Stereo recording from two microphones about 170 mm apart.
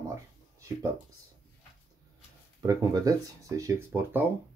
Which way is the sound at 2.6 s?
20° right (ahead or behind).